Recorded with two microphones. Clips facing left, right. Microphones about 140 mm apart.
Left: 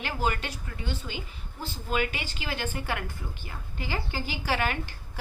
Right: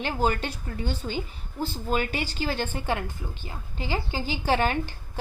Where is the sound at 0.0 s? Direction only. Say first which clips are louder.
Right 4 dB; 35° right (ahead or behind).